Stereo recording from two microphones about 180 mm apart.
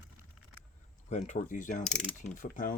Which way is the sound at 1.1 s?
40° left (ahead or behind).